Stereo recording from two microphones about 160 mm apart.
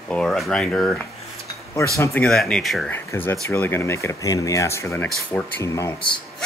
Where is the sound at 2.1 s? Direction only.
5° left (ahead or behind).